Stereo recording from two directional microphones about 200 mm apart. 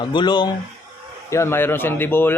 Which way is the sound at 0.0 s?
20° left (ahead or behind).